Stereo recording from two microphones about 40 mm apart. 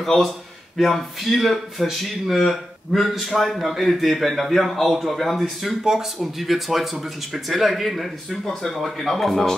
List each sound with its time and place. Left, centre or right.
0.0 s a man's voice: centre